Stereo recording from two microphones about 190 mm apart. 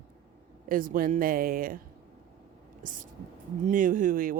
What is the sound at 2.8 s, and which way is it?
Speech, 45° right (ahead or behind).